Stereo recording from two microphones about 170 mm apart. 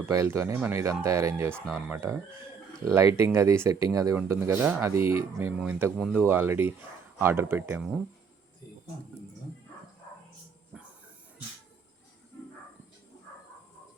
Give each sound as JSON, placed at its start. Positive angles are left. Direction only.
{"t": 0.0, "sound": "speech", "side_deg": -15}